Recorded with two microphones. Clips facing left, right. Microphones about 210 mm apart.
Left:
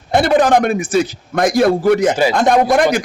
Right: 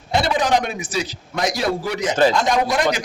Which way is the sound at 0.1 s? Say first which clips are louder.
Left 7 dB; 55° left (ahead or behind).